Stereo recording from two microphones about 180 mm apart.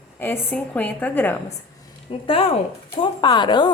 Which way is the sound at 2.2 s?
30° left (ahead or behind).